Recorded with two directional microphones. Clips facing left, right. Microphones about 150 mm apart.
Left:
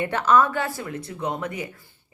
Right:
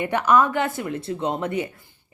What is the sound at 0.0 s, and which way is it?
A woman's voice, 15° right (ahead or behind).